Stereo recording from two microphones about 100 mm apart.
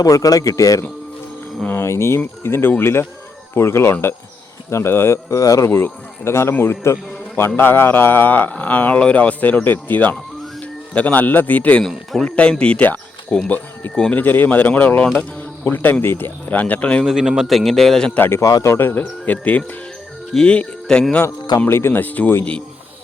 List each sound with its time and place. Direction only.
0.0 s a man's voice: 35° left (ahead or behind); by 17.0 s 15° left (ahead or behind)
17.0 s a man's voice: 5° right (ahead or behind)
18.2 s speech: 25° left (ahead or behind); by 21.2 s 5° left (ahead or behind)
21.7 s speech: 25° left (ahead or behind)